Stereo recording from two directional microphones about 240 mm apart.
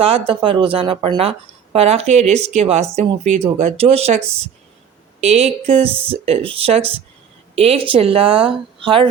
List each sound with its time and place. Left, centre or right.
0.0 s speech: right
5.2 s speech: right